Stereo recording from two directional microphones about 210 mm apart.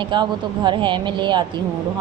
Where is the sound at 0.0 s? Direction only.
20° right (ahead or behind).